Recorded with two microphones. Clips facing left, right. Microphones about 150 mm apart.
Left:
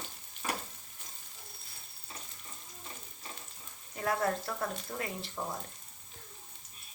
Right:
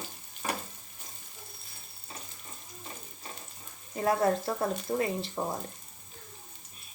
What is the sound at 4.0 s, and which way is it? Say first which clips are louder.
Frying: right 6 dB; 25° right (ahead or behind).